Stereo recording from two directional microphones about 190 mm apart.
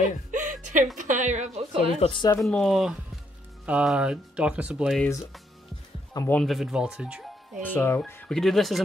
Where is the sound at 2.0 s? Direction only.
25° left (ahead or behind).